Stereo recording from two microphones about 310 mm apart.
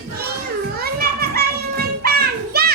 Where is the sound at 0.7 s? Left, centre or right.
Right.